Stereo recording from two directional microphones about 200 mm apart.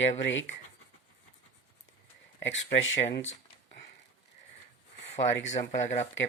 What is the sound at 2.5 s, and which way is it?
Speech, 75° left (ahead or behind).